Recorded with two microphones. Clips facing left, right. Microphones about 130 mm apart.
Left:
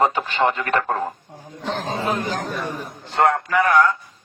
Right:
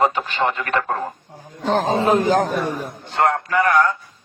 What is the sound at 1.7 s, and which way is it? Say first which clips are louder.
Speech: right 7 dB; 45° right (ahead or behind).